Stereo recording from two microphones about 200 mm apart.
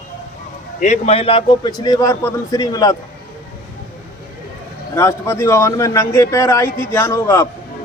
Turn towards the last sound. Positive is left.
turn(degrees=15)  # may be behind; listen again after turning